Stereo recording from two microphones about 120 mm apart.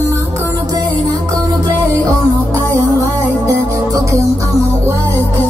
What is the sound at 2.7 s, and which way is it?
Music, 25° right (ahead or behind).